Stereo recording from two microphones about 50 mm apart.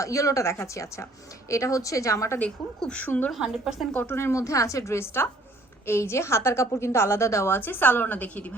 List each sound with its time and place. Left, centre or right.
0.0 s a woman's voice: left
3.0 s a woman's voice: left
3.4 s a woman's voice: centre
4.0 s a woman's voice: left
4.3 s a woman's voice: left
7.5 s a woman's voice: left